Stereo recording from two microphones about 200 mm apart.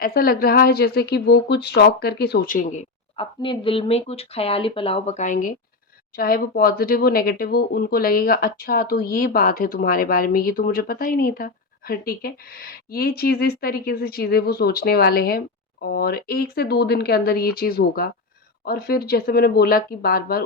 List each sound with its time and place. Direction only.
0.0 s speech: 50° left (ahead or behind)
3.2 s speech: 25° left (ahead or behind); by 20.4 s 50° left (ahead or behind)